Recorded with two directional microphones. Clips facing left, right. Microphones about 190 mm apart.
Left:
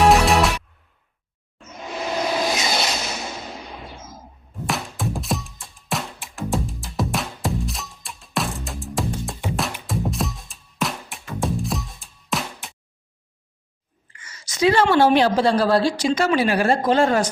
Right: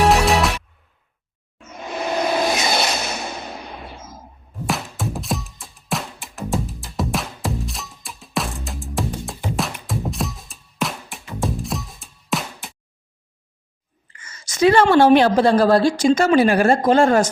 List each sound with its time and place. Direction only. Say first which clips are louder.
0.1 s music: even; centre (ahead or behind)
1.9 s a sound: right 3 dB; 55° right (ahead or behind)
4.6 s music: right 1 dB; centre (ahead or behind)
14.3 s a woman's voice: right 3 dB; 50° right (ahead or behind)